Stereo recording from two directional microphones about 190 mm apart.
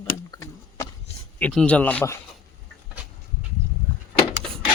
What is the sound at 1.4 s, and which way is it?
Speech, 5° left (ahead or behind).